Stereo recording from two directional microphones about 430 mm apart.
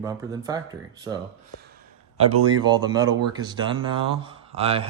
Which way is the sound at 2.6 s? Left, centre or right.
Centre.